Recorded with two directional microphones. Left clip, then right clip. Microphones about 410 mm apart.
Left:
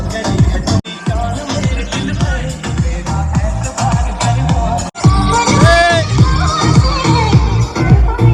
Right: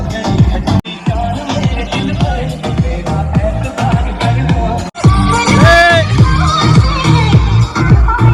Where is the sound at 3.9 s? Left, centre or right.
Centre.